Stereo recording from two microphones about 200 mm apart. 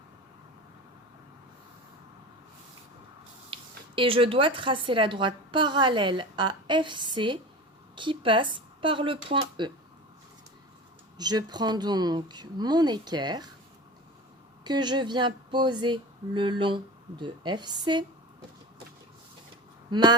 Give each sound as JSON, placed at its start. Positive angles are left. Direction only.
{"t": 3.5, "sound": "speech", "side_deg": -25}
{"t": 11.2, "sound": "speech", "side_deg": -20}
{"t": 14.6, "sound": "speech", "side_deg": -20}
{"t": 19.9, "sound": "speech", "side_deg": -20}